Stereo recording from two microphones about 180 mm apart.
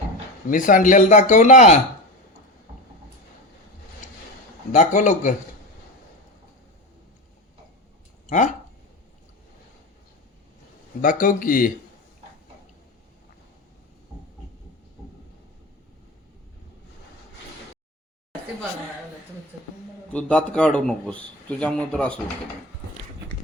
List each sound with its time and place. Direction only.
0.5 s speech: 50° left (ahead or behind)
4.7 s speech: 40° left (ahead or behind)
11.0 s speech: 50° left (ahead or behind)
20.1 s a man's voice: 5° left (ahead or behind)